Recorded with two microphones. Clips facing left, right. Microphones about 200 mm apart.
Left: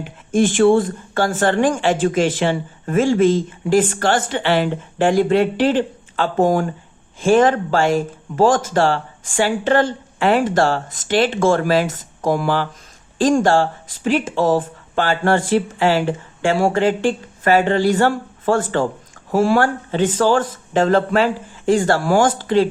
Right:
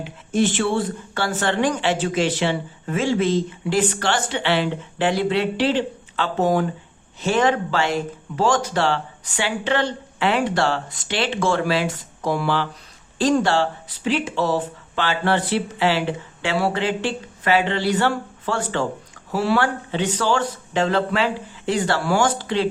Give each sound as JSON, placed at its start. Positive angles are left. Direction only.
{"t": 0.3, "sound": "a woman's voice", "side_deg": 50}